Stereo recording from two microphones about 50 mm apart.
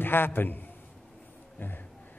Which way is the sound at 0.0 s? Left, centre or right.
Left.